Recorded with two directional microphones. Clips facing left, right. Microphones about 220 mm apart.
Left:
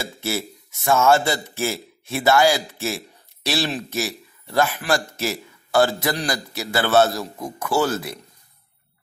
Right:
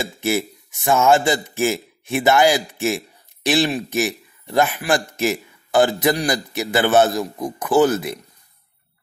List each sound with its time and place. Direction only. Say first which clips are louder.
0.0 s a man's voice: right 5 dB; 15° right (ahead or behind)